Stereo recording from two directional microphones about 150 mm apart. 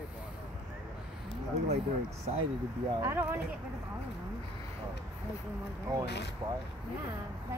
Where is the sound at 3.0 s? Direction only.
15° right (ahead or behind).